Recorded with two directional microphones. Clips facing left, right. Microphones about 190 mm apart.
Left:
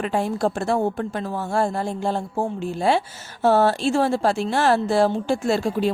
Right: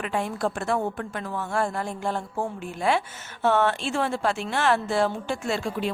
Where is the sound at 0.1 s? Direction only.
35° left (ahead or behind).